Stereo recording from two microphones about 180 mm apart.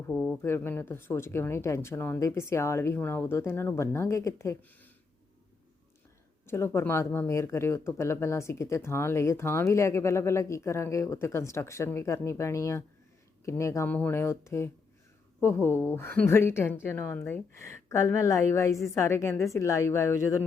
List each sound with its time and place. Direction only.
0.1 s speech: centre (ahead or behind)
0.4 s speech: 15° left (ahead or behind)
6.4 s speech: 15° left (ahead or behind)